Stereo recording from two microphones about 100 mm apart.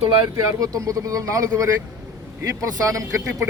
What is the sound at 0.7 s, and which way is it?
Speech, 35° right (ahead or behind).